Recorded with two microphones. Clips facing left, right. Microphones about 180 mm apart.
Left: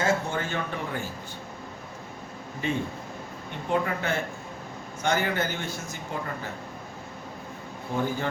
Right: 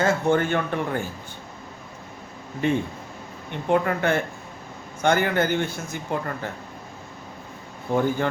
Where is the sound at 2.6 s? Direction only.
55° right (ahead or behind).